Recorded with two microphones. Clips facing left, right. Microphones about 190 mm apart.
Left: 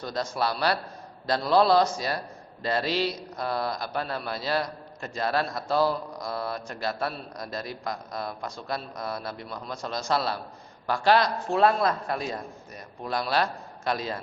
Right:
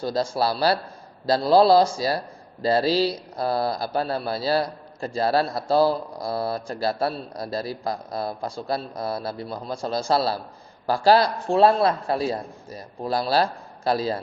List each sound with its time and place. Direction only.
0.0 s a man's voice: 30° right (ahead or behind)